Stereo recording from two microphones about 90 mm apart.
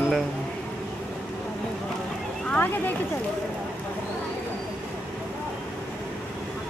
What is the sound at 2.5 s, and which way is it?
Vehicle, 20° left (ahead or behind).